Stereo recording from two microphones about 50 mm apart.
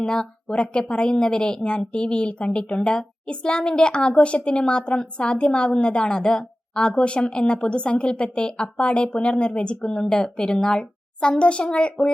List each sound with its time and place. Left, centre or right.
0.0 s a woman's voice: centre